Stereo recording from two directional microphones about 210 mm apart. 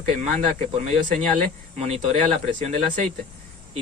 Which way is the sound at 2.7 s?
35° right (ahead or behind).